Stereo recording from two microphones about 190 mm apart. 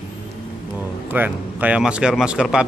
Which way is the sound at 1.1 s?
10° right (ahead or behind).